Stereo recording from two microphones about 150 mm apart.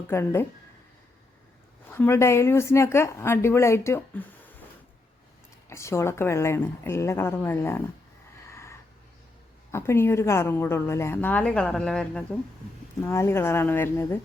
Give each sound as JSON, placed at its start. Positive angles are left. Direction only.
{"t": 0.1, "sound": "a woman's voice", "side_deg": 15}
{"t": 1.9, "sound": "a woman's voice", "side_deg": 15}
{"t": 5.6, "sound": "a woman's voice", "side_deg": 20}
{"t": 8.4, "sound": "a sound", "side_deg": 20}
{"t": 9.7, "sound": "a woman's voice", "side_deg": 15}
{"t": 13.0, "sound": "a woman's voice", "side_deg": 15}